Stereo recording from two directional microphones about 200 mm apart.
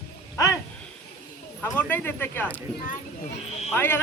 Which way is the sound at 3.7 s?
10° left (ahead or behind).